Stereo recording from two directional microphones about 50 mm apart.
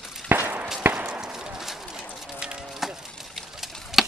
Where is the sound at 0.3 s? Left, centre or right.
Right.